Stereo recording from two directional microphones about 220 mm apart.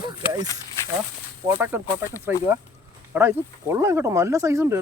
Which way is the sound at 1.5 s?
10° right (ahead or behind).